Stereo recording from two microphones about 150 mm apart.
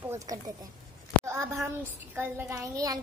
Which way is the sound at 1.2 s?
20° right (ahead or behind).